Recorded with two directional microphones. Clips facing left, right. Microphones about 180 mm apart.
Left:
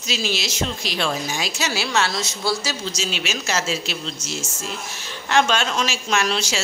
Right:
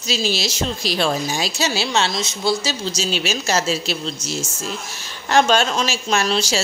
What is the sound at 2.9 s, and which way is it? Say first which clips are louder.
A woman's voice: right 4 dB; 35° right (ahead or behind).